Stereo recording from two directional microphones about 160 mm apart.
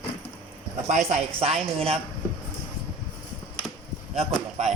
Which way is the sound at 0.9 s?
45° right (ahead or behind).